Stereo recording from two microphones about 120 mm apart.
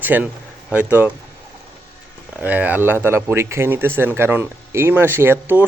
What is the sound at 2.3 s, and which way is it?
Speech, 15° right (ahead or behind).